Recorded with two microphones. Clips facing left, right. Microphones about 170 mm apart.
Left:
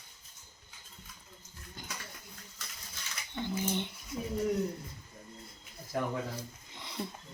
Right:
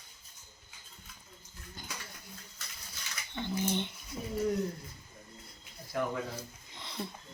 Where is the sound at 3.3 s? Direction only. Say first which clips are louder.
Right 1 dB; 10° left (ahead or behind).